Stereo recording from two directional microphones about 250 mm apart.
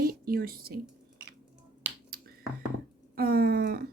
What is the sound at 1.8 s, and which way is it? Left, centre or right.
Finger snapping, right.